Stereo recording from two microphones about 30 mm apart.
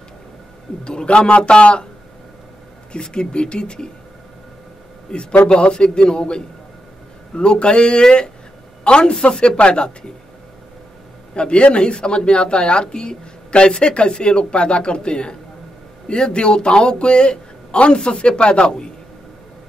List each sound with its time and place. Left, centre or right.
0.8 s a woman's voice: left
2.9 s speech: left
5.1 s speech: left
5.5 s a woman's voice: left
11.3 s a woman's voice: left